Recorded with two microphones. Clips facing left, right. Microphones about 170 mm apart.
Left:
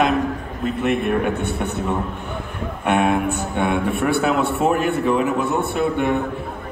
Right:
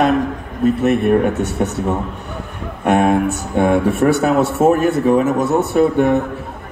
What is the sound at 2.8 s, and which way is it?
A man's voice, 40° right (ahead or behind).